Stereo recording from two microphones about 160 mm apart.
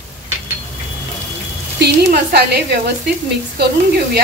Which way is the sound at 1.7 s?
90° right.